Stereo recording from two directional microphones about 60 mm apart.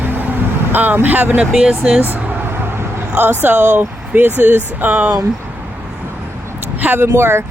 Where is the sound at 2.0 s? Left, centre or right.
Right.